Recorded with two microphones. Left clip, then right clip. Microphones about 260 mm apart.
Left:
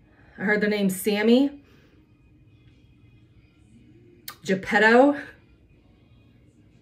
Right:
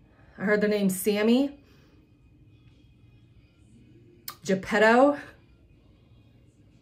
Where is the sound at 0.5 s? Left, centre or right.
Centre.